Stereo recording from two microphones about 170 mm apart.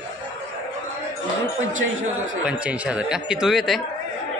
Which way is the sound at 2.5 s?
5° right (ahead or behind).